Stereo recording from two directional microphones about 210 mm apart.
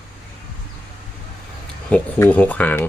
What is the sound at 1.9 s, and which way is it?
Speech, 5° left (ahead or behind).